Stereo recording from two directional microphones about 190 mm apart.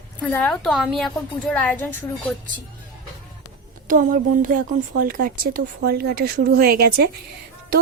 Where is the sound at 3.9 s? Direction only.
45° right (ahead or behind).